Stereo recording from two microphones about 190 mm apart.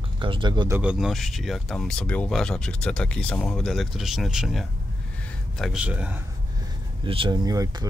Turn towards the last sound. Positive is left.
turn(degrees=-20)  # may be behind; listen again after turning